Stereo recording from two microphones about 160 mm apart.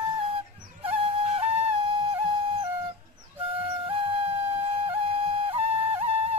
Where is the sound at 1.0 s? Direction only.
35° right (ahead or behind).